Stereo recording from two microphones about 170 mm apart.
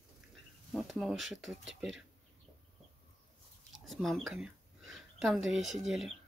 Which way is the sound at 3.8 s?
Centre (ahead or behind).